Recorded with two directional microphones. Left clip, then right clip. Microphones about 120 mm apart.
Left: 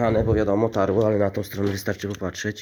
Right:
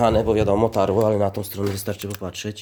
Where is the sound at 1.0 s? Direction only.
20° right (ahead or behind).